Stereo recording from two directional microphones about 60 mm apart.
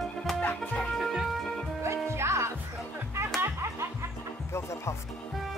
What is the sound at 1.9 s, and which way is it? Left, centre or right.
Music, right.